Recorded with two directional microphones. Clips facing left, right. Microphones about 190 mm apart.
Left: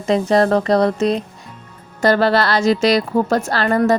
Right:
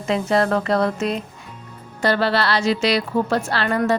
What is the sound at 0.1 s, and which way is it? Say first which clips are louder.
A woman's voice: left 4 dB; 40° left (ahead or behind).